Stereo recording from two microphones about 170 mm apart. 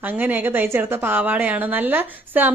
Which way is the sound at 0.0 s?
10° right (ahead or behind).